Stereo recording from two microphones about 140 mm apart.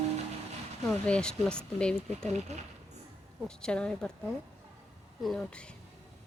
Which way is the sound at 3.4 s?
5° left (ahead or behind).